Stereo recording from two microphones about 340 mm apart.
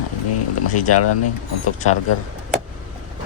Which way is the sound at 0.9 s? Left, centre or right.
Left.